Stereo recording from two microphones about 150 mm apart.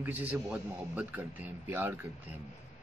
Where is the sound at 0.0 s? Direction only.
10° right (ahead or behind).